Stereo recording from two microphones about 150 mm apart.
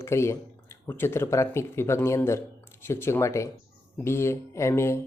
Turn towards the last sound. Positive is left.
turn(degrees=20)  # may be behind; listen again after turning